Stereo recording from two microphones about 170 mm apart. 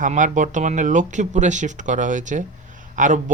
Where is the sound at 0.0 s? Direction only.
50° right (ahead or behind).